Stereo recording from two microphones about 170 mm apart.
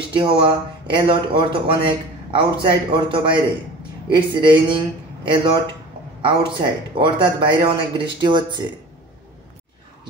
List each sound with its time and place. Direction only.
0.1 s speech: 30° right (ahead or behind)